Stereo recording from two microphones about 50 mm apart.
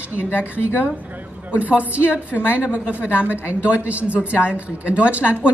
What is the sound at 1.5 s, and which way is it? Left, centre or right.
A woman's voice, right.